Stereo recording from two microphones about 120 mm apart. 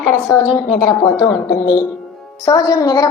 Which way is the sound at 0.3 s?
25° left (ahead or behind).